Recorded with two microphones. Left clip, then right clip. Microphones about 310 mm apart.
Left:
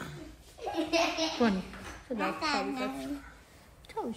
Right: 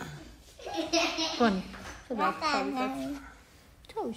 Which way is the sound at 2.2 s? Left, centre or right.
Right.